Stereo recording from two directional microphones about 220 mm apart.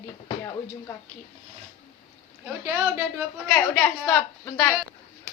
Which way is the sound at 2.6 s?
10° right (ahead or behind).